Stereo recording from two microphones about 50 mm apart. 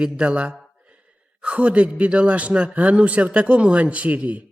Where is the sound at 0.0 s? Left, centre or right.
Right.